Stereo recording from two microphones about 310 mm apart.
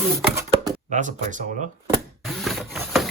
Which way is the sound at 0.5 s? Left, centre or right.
Right.